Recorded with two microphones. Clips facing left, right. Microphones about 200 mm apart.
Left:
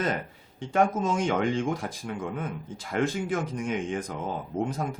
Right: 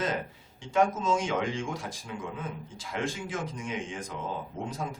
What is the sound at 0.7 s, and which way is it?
Speech, 60° left (ahead or behind).